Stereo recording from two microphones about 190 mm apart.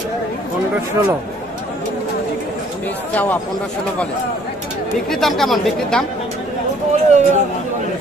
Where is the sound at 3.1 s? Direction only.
10° left (ahead or behind).